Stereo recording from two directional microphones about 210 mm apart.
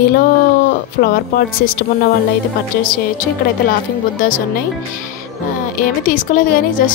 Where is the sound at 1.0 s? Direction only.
45° left (ahead or behind).